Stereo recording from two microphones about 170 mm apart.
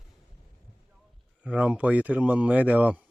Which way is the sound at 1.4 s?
10° right (ahead or behind).